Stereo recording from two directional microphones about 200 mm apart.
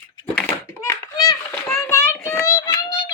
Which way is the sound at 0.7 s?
15° left (ahead or behind).